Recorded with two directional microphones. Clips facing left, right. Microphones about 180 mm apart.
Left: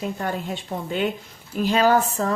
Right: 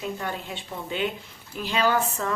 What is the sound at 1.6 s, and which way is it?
Speech, 45° left (ahead or behind).